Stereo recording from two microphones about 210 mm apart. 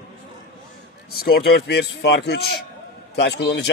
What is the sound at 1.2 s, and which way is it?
A man's voice, 50° left (ahead or behind).